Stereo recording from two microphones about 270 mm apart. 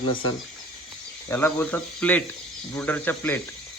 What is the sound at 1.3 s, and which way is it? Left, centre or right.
Speech, centre.